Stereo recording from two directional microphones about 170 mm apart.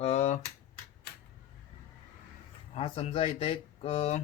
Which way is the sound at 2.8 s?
35° left (ahead or behind).